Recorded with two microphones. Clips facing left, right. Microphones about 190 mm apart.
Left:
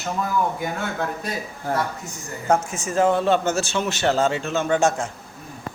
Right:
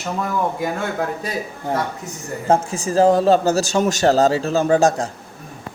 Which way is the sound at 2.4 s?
30° right (ahead or behind).